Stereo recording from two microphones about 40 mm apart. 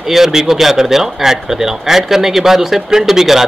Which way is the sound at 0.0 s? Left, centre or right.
Centre.